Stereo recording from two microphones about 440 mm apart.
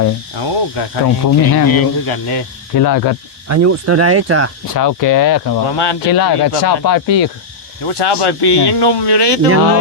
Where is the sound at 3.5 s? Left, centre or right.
Right.